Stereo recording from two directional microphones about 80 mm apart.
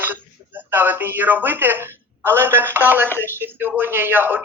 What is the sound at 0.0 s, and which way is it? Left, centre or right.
A man's voice, right.